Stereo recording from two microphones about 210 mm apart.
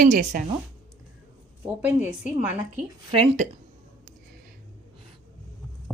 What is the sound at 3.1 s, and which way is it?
Speech, 25° right (ahead or behind).